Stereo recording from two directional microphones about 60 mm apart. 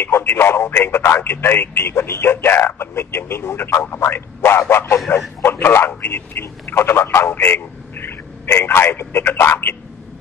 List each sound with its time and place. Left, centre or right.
0.0 s speech: left